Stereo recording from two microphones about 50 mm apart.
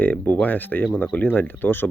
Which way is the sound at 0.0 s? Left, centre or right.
Left.